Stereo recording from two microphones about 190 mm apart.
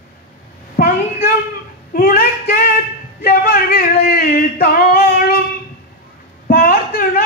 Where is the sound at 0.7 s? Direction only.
50° left (ahead or behind).